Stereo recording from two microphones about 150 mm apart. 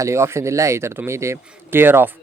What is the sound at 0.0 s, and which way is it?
Speech, 20° right (ahead or behind).